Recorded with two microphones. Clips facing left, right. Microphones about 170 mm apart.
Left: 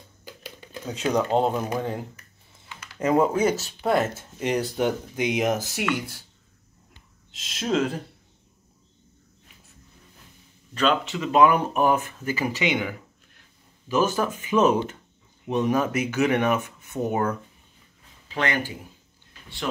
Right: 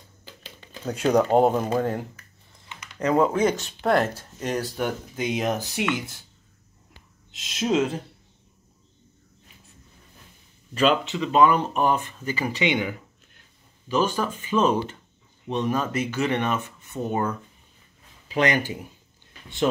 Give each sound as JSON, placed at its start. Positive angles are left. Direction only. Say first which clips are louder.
{"t": 0.2, "sound": "a sound", "louder": "left 5 dB", "side_deg": 10}
{"t": 0.9, "sound": "speech", "louder": "right 4 dB", "side_deg": -10}
{"t": 1.8, "sound": "speech", "louder": "right 4 dB", "side_deg": 0}
{"t": 4.1, "sound": "speech", "louder": "left 2 dB", "side_deg": 15}
{"t": 5.8, "sound": "speech", "louder": "even", "side_deg": 0}
{"t": 7.5, "sound": "speech", "louder": "right 2 dB", "side_deg": -5}
{"t": 10.7, "sound": "speech", "louder": "right 2 dB", "side_deg": -10}
{"t": 11.1, "sound": "speech", "louder": "left 3 dB", "side_deg": 10}
{"t": 13.8, "sound": "speech", "louder": "left 1 dB", "side_deg": 10}
{"t": 18.3, "sound": "speech", "louder": "right 4 dB", "side_deg": -15}